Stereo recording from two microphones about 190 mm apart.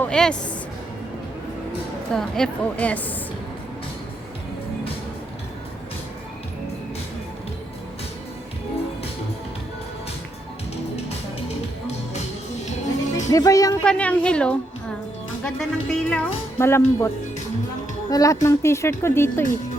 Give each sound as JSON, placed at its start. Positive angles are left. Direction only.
{"t": 0.0, "sound": "speech", "side_deg": 5}
{"t": 2.1, "sound": "a woman's voice", "side_deg": 5}
{"t": 12.6, "sound": "music", "side_deg": 40}
{"t": 13.3, "sound": "speech", "side_deg": 20}
{"t": 13.8, "sound": "a woman's voice", "side_deg": 5}
{"t": 18.1, "sound": "speech", "side_deg": 20}